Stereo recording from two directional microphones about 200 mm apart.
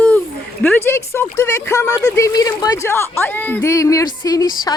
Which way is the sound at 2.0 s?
15° left (ahead or behind).